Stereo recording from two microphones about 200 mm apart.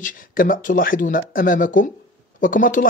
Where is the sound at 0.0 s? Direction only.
40° left (ahead or behind).